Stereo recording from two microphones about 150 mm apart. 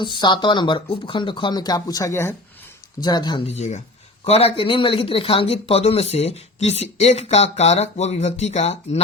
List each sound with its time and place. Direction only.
0.0 s speech: 30° left (ahead or behind)
3.4 s speech: 50° left (ahead or behind)